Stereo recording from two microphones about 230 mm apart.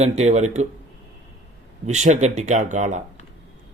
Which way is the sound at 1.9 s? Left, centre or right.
Right.